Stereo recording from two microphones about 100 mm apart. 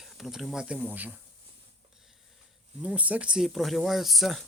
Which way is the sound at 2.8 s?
15° right (ahead or behind).